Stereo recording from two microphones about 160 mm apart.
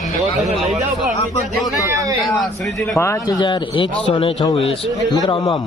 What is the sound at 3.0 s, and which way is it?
A man's voice, 20° left (ahead or behind).